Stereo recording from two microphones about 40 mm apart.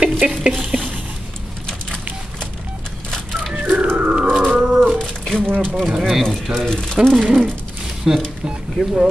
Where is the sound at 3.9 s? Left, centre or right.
Right.